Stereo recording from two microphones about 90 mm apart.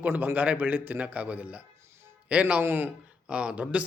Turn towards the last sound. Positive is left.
turn(degrees=-15)  # may be behind; listen again after turning